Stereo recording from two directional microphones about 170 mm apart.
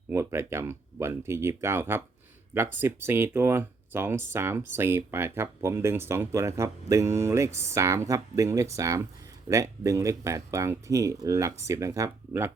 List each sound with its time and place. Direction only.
0.1 s speech: 15° right (ahead or behind)